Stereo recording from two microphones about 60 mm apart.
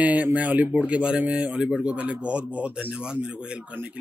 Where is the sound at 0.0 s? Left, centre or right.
Right.